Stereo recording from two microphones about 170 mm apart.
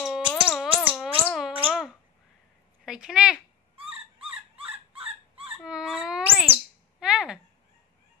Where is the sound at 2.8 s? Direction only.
5° right (ahead or behind).